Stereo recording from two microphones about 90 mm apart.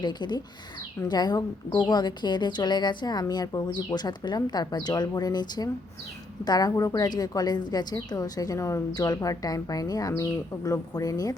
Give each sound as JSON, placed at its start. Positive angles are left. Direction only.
{"t": 0.0, "sound": "speech", "side_deg": 55}